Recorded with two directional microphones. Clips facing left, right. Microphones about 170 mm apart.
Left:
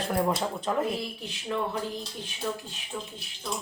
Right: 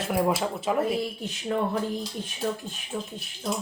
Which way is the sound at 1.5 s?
45° right (ahead or behind).